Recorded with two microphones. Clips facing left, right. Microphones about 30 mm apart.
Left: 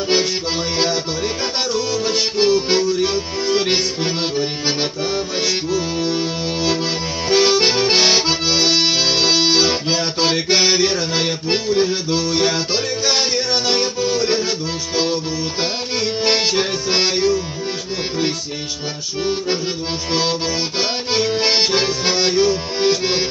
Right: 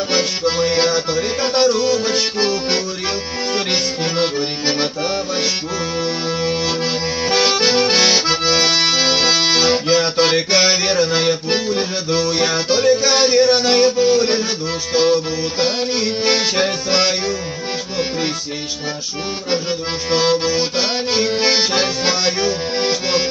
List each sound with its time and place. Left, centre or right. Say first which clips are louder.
0.1 s accordion: even; right
1.4 s music: right 9 dB; right
4.0 s music: right 1 dB; right
7.2 s accordion: left 2 dB; right
8.3 s accordion: right 1 dB; right
9.6 s music: right 3 dB; right
12.1 s music: right 1 dB; right
16.9 s music: left 3 dB; right
20.1 s music: right 4 dB; right
21.1 s accordion: even; right